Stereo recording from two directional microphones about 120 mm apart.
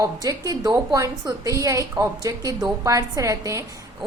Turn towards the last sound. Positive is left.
turn(degrees=-30)  # may be behind; listen again after turning